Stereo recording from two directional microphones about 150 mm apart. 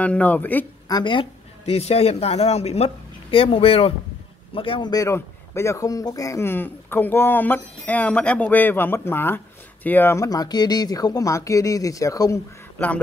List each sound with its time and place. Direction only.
0.0 s speech: 10° left (ahead or behind)
0.8 s speech: 30° left (ahead or behind)
1.7 s a man's voice: 45° left (ahead or behind); by 13.0 s 15° left (ahead or behind)